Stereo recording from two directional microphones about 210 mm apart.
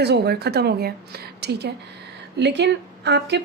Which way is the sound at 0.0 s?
50° right (ahead or behind).